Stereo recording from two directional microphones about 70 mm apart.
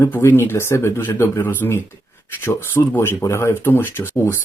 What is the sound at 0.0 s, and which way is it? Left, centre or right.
Speech, left.